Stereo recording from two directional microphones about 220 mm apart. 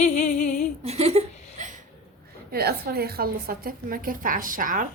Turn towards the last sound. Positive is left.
turn(degrees=-35)  # may be behind; listen again after turning